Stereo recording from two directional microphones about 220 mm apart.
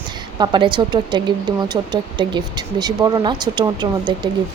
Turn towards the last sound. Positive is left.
turn(degrees=-20)  # may be behind; listen again after turning